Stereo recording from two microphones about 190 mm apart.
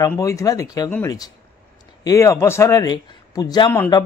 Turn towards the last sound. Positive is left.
turn(degrees=15)  # may be behind; listen again after turning